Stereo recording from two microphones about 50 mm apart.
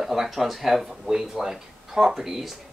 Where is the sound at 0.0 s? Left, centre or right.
Centre.